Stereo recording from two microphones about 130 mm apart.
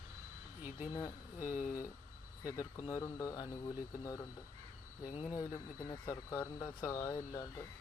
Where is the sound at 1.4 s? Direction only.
85° left.